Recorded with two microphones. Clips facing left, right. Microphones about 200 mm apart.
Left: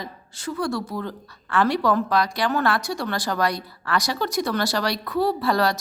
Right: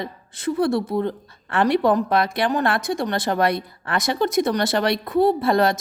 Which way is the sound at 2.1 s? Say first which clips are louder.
Right 2 dB; 55° right (ahead or behind).